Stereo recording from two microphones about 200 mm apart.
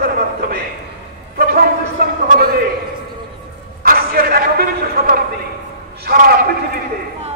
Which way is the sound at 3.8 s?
45° right (ahead or behind).